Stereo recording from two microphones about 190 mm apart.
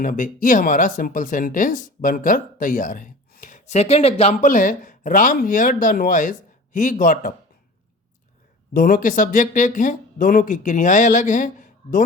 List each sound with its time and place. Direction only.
0.0 s speech: 45° left (ahead or behind)
8.7 s speech: 50° left (ahead or behind)